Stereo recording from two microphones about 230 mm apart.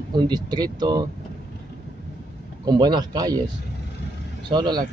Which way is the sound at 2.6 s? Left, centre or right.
Centre.